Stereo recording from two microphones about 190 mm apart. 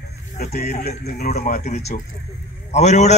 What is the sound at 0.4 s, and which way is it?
A man's voice, 55° left (ahead or behind).